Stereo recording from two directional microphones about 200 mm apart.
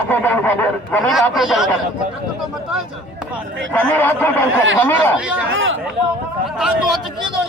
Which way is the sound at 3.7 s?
10° left (ahead or behind).